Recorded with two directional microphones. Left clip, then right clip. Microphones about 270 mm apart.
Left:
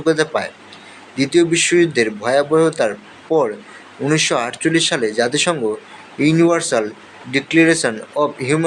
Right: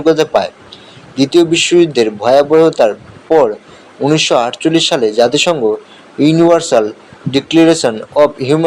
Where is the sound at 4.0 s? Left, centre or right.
Centre.